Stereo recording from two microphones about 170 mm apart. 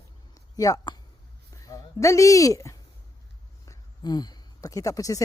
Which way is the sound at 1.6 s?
20° left (ahead or behind).